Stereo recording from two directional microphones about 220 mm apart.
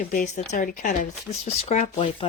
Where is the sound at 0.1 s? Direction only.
35° left (ahead or behind).